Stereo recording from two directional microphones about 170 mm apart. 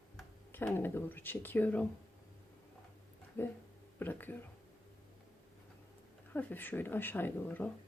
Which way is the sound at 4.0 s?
10° left (ahead or behind).